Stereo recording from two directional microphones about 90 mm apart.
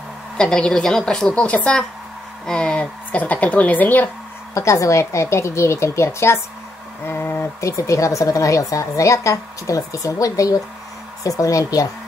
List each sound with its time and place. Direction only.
0.4 s a woman's voice: 10° left (ahead or behind)
4.6 s a woman's voice: 35° left (ahead or behind)
7.1 s a sound: 25° left (ahead or behind)
7.6 s a woman's voice: 35° left (ahead or behind)